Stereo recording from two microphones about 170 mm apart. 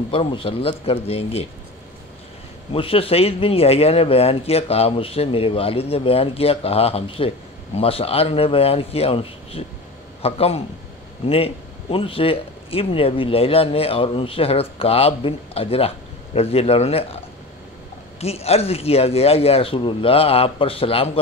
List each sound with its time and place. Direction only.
0.1 s speech: 30° left (ahead or behind)
2.7 s speech: 35° left (ahead or behind)
18.2 s speech: 35° left (ahead or behind)